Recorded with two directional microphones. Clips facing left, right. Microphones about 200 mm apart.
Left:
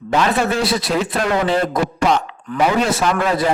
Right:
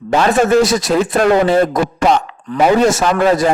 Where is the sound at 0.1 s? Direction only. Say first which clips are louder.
Right 6 dB; 45° right (ahead or behind).